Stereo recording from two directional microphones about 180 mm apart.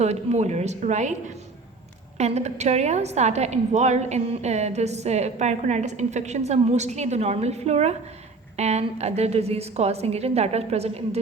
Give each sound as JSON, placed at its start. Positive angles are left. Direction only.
{"t": 0.0, "sound": "a woman's voice", "side_deg": -40}
{"t": 2.1, "sound": "a woman's voice", "side_deg": -40}